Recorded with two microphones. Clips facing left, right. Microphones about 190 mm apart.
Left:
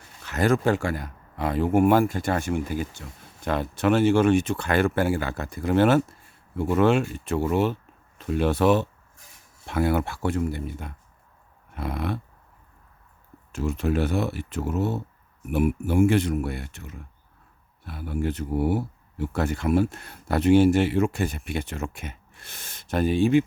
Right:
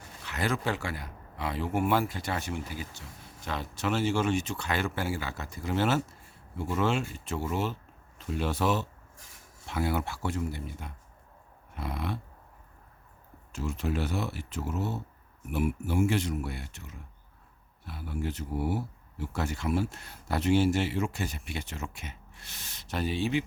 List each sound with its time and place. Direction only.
0.3 s speech: 45° left (ahead or behind)
13.5 s speech: 55° left (ahead or behind)